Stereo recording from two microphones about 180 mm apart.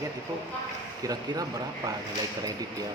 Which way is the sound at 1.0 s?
20° right (ahead or behind).